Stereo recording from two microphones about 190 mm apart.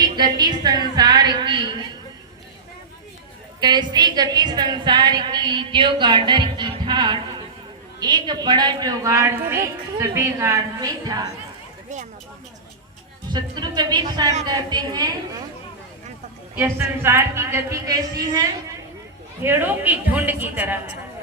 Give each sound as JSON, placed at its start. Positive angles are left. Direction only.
{"t": 0.0, "sound": "a sound", "side_deg": -20}
{"t": 3.6, "sound": "a woman's voice", "side_deg": -20}
{"t": 13.3, "sound": "a woman's voice", "side_deg": -20}
{"t": 16.6, "sound": "a woman's voice", "side_deg": -10}